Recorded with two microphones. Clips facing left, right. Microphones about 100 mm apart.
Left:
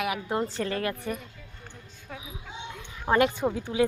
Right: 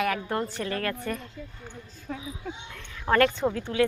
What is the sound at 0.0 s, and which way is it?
A woman's voice, 15° left (ahead or behind).